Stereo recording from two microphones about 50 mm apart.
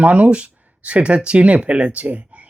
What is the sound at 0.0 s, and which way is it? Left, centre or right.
Speech, right.